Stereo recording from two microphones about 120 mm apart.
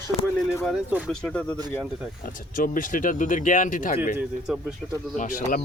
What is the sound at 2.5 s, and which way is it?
Speech, 90° left.